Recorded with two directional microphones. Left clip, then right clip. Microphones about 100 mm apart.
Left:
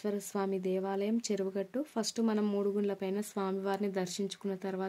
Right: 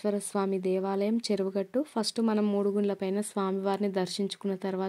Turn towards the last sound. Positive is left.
turn(degrees=-40)  # may be behind; listen again after turning